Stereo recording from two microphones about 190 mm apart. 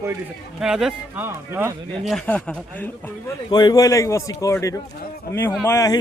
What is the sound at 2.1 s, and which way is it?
Speech, 5° left (ahead or behind).